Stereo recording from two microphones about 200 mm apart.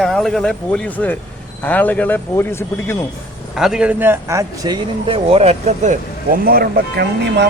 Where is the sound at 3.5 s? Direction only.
Centre (ahead or behind); by 6.0 s 35° right (ahead or behind).